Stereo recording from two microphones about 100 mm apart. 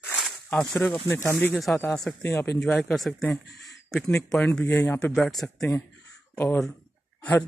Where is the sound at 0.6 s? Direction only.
5° left (ahead or behind).